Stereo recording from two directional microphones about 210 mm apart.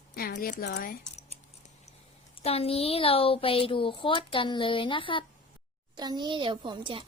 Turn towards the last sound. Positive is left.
turn(degrees=-25)  # may be behind; listen again after turning